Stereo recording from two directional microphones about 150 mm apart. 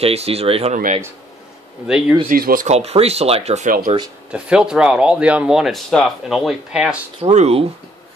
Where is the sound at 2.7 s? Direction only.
45° right (ahead or behind).